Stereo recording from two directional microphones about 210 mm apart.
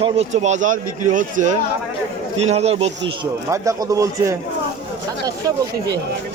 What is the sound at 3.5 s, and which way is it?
Speech, 15° right (ahead or behind).